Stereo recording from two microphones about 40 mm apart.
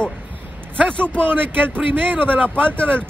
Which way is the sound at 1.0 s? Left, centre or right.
Right.